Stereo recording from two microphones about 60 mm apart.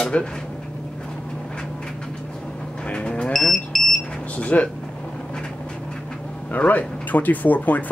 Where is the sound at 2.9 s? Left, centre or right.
Centre.